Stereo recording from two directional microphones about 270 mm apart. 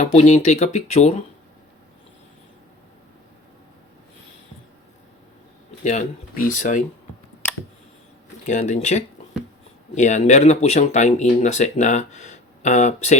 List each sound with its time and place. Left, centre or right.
0.0 s speech: left
5.8 s speech: left
8.4 s speech: left